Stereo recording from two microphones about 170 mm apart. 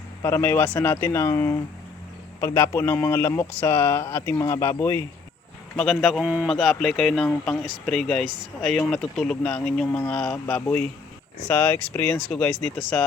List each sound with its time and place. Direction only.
0.2 s speech: 15° left (ahead or behind)
5.7 s speech: 5° left (ahead or behind)